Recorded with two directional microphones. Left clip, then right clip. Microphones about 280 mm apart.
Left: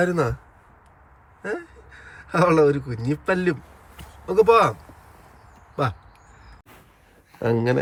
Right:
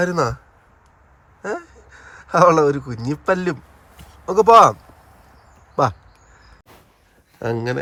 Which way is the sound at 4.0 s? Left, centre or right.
Centre.